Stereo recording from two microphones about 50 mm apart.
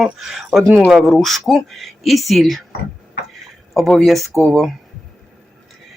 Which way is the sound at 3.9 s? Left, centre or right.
Centre.